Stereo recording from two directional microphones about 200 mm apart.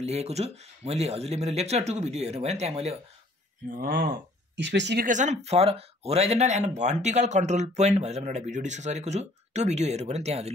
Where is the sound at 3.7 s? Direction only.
45° right (ahead or behind); by 5.1 s 60° right (ahead or behind).